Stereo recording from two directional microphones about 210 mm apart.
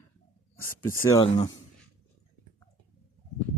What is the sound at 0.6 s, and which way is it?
Speech, 10° left (ahead or behind).